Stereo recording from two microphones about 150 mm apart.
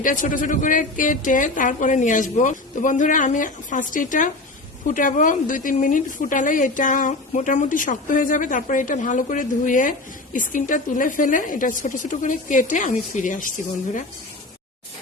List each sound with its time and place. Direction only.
0.0 s a woman's voice: 60° left (ahead or behind)